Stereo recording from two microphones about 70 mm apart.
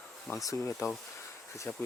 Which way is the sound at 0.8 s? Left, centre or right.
Left.